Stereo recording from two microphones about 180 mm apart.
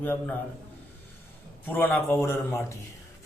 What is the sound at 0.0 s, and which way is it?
Speech, 10° left (ahead or behind).